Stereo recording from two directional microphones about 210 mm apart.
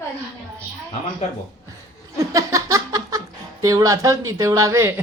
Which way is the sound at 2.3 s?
15° right (ahead or behind).